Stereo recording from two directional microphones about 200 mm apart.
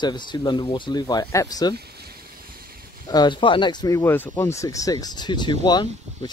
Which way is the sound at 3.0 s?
20° left (ahead or behind).